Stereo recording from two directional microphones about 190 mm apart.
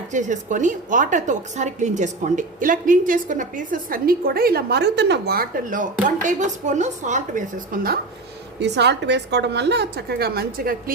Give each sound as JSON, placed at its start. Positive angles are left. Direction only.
{"t": 0.1, "sound": "a woman's voice", "side_deg": -40}
{"t": 8.5, "sound": "a woman's voice", "side_deg": -65}